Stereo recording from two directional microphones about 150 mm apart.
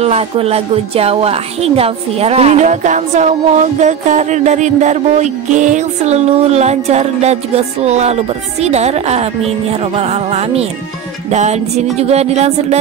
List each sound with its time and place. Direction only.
0.0 s a woman's voice: 45° right (ahead or behind)